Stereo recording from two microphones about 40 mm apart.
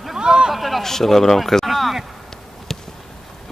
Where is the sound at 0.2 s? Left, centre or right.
Centre.